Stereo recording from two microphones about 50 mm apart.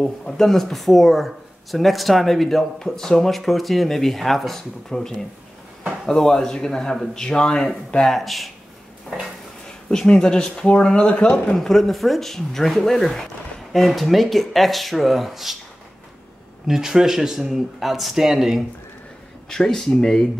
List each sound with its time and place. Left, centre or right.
0.0 s speech: centre
9.8 s speech: centre
11.5 s speech: centre
16.6 s speech: centre
19.5 s speech: centre